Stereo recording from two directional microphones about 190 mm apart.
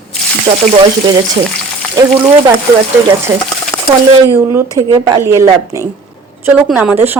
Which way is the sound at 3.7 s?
20° left (ahead or behind).